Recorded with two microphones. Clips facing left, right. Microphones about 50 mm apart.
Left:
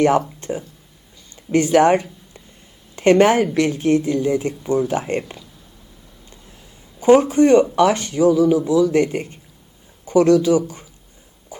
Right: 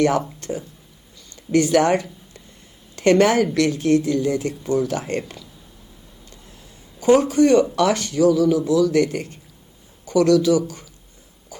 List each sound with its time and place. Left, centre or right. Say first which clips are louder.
0.3 s a sound: left 2 dB; left
1.5 s a woman's voice: left 3 dB; left
7.0 s a woman's voice: left 2 dB; left